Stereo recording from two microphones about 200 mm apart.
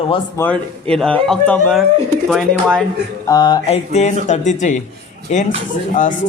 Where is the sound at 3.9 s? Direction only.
35° left (ahead or behind).